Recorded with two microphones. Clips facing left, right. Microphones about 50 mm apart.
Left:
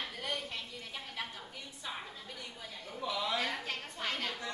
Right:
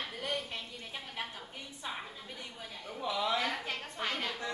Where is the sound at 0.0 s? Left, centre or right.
Centre.